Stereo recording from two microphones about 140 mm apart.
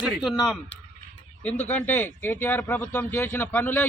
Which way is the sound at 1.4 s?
10° left (ahead or behind).